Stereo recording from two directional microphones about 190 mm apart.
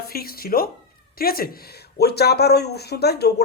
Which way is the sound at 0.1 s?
50° left (ahead or behind).